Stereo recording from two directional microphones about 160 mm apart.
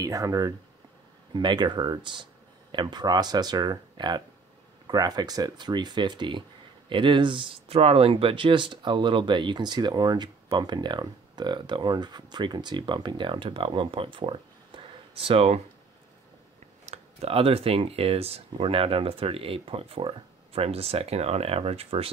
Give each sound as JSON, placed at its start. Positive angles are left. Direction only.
{"t": 0.0, "sound": "speech", "side_deg": -20}
{"t": 16.8, "sound": "speech", "side_deg": -45}